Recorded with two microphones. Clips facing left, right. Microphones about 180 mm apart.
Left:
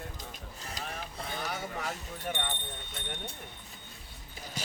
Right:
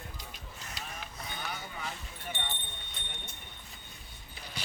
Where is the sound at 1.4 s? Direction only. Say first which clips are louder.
Left 4 dB; 45° left (ahead or behind).